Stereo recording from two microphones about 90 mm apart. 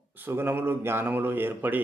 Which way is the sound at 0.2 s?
25° right (ahead or behind).